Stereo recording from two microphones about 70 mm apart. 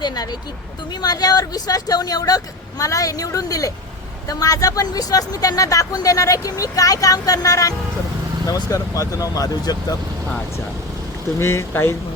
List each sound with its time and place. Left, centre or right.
0.0 s speech: left
8.7 s speech: left
11.3 s speech: left